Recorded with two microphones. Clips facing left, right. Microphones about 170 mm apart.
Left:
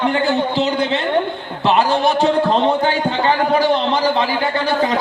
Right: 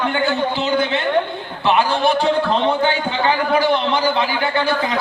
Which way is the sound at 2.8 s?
35° left (ahead or behind).